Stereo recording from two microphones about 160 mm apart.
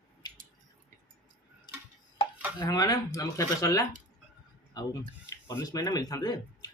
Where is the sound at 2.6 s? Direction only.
25° left (ahead or behind).